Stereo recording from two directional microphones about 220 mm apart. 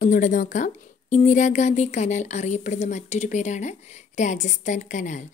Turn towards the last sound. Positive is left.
turn(degrees=35)  # may be behind; listen again after turning